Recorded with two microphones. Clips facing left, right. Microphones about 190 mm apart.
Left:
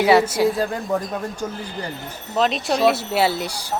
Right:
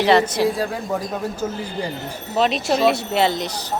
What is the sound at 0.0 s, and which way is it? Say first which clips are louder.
A woman's voice: left 1 dB; 10° left (ahead or behind).